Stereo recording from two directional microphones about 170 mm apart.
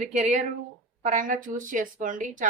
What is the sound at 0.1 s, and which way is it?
A woman's voice, 45° right (ahead or behind).